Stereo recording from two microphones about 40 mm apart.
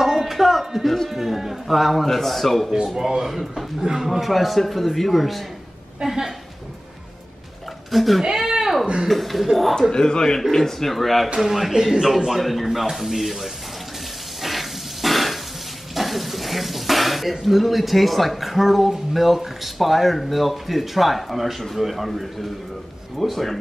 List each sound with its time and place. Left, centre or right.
0.0 s a sound: centre
3.0 s speech: centre
6.0 s speech: centre
7.9 s speech: centre
9.9 s speech: centre
11.3 s speech: centre
12.6 s speech: centre
14.4 s a sound: centre
15.9 s speech: centre